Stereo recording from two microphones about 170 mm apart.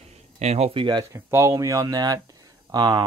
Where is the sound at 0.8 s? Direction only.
20° right (ahead or behind).